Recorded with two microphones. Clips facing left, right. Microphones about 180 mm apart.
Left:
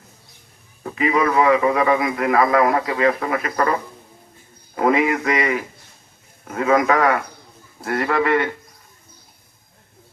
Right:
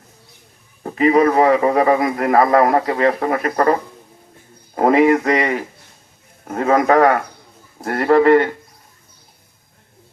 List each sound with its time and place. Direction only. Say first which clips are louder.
0.8 s a man's voice: right 6 dB; 40° right (ahead or behind)